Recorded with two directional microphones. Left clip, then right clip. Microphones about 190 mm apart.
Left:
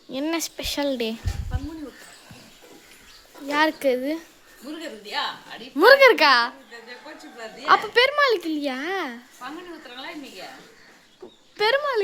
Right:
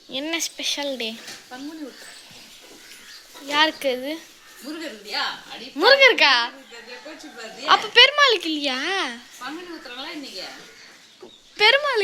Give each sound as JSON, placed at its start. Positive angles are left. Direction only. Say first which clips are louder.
{"t": 0.1, "sound": "speech", "louder": "even", "side_deg": 25}
{"t": 3.4, "sound": "a woman's voice", "louder": "right 1 dB", "side_deg": 30}
{"t": 5.7, "sound": "a woman's voice", "louder": "left 1 dB", "side_deg": 40}
{"t": 7.6, "sound": "speech", "louder": "right 3 dB", "side_deg": 25}
{"t": 11.5, "sound": "speech", "louder": "right 4 dB", "side_deg": 20}